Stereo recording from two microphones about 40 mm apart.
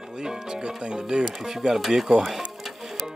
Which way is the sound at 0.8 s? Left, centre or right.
Centre.